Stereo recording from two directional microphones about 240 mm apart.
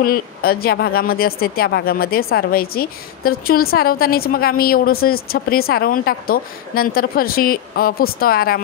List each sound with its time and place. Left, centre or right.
0.0 s a woman's voice: left